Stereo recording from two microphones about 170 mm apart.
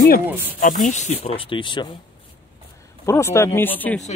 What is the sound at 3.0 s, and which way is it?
Speech, 15° left (ahead or behind).